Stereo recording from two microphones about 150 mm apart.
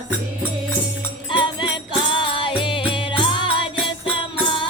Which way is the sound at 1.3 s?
35° left (ahead or behind).